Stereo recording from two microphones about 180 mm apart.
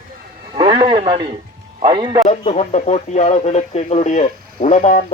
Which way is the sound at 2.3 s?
35° left (ahead or behind).